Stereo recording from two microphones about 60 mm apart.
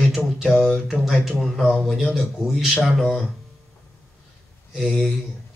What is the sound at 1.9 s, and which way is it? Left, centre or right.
Speech, centre.